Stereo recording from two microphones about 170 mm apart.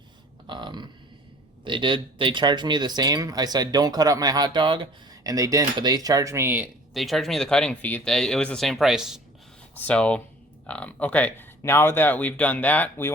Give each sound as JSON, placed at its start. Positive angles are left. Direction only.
{"t": 0.4, "sound": "speech", "side_deg": -25}
{"t": 6.9, "sound": "speech", "side_deg": 0}